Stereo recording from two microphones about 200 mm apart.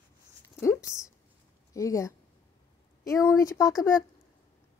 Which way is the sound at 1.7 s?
15° left (ahead or behind).